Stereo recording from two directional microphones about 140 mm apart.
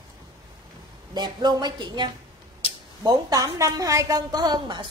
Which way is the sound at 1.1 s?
30° right (ahead or behind).